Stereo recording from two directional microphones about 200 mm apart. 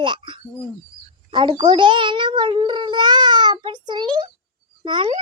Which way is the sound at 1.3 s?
25° right (ahead or behind).